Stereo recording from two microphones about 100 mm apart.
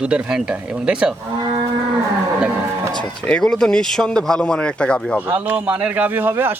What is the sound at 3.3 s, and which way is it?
Speech, 10° left (ahead or behind).